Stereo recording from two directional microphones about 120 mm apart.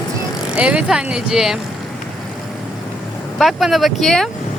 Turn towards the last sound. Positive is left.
turn(degrees=0)  # may be behind; listen again after turning